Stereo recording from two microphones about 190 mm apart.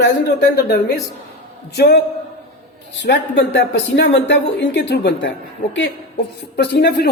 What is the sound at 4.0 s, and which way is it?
Speech, 70° left (ahead or behind).